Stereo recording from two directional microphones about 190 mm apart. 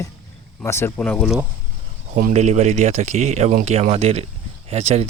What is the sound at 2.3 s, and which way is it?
Speech, 35° right (ahead or behind).